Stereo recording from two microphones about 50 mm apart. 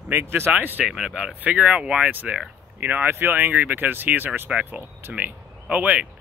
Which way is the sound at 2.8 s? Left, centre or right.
Right.